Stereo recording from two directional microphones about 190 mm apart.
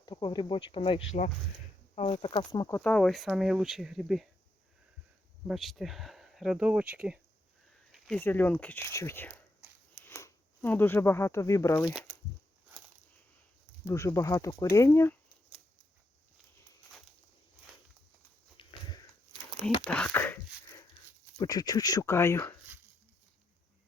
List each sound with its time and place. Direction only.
0.0 s speech: 25° left (ahead or behind); by 4.3 s centre (ahead or behind)
5.5 s speech: centre (ahead or behind)
7.7 s a sound: centre (ahead or behind)
8.2 s speech: 10° left (ahead or behind)
9.6 s a sound: 10° right (ahead or behind)
10.0 s speech: 15° left (ahead or behind)
13.8 s speech: 15° left (ahead or behind)
18.5 s sniff: 25° left (ahead or behind)
19.8 s speech: 5° left (ahead or behind)
20.7 s a sound: 20° left (ahead or behind)